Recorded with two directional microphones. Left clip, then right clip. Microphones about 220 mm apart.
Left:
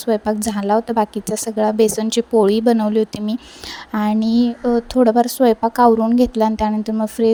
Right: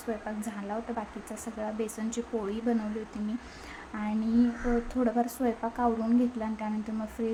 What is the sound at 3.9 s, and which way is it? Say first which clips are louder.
A woman's voice: left 12 dB; 45° left (ahead or behind).